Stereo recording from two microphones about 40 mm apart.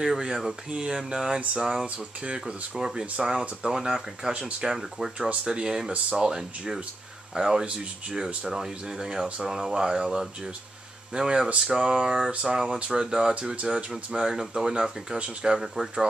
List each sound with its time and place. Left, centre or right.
0.0 s speech: centre
5.4 s speech: right
11.1 s speech: centre
13.6 s speech: right
14.1 s speech: centre
15.1 s speech: right
15.5 s speech: centre